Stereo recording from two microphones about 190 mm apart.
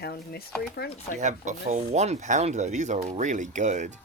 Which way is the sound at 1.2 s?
40° right (ahead or behind).